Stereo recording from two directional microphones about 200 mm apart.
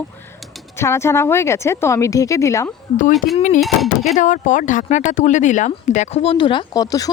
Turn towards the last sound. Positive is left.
turn(degrees=20)  # may be behind; listen again after turning